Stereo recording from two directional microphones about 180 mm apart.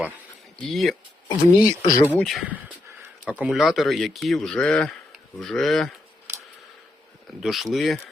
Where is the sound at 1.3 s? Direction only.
20° left (ahead or behind).